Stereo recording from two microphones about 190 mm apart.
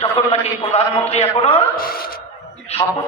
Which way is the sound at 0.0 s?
30° left (ahead or behind).